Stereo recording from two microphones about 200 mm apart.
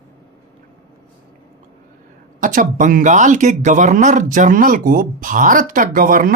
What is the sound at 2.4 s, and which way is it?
Speech, 40° right (ahead or behind).